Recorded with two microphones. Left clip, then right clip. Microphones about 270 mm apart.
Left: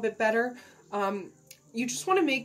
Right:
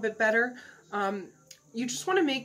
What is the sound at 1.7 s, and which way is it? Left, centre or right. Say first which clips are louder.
Speech: left 1 dB; centre.